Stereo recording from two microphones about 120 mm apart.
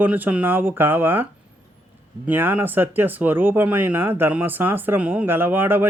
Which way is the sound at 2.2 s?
15° right (ahead or behind).